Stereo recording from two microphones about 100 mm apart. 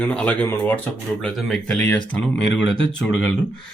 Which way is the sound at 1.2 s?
Centre (ahead or behind).